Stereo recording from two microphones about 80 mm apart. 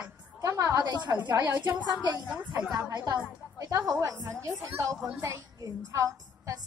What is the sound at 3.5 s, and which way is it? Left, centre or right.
A woman's voice, right.